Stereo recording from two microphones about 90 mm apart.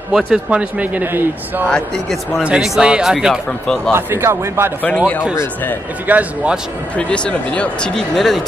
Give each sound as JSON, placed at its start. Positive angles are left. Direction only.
{"t": 0.3, "sound": "a man's voice", "side_deg": -15}
{"t": 1.7, "sound": "a man's voice", "side_deg": 0}
{"t": 3.9, "sound": "a man's voice", "side_deg": -30}
{"t": 4.8, "sound": "speech", "side_deg": 15}
{"t": 5.3, "sound": "speech", "side_deg": 30}
{"t": 6.0, "sound": "a man's voice", "side_deg": -15}
{"t": 7.0, "sound": "speech", "side_deg": 10}